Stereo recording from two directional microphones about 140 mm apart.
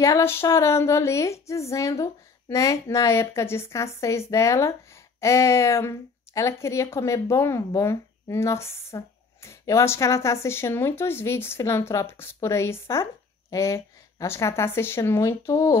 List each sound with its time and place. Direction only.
0.0 s a woman's voice: 20° left (ahead or behind)